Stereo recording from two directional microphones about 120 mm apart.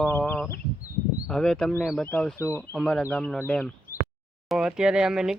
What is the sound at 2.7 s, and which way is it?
Speech, 5° left (ahead or behind).